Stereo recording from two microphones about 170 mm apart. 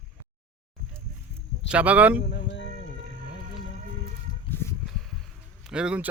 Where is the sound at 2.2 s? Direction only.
90° left.